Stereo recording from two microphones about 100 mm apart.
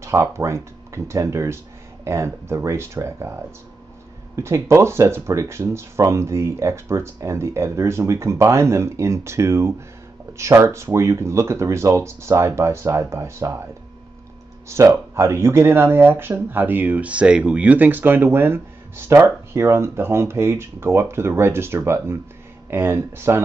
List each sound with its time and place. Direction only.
0.0 s speech: 30° right (ahead or behind)
4.4 s speech: 30° right (ahead or behind)
14.7 s speech: 30° right (ahead or behind)